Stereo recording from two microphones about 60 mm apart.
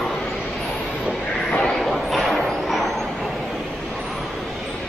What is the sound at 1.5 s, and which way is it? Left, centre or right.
Vehicle, centre.